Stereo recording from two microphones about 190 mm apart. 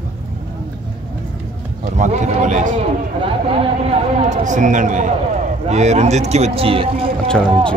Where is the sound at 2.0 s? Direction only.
40° right (ahead or behind).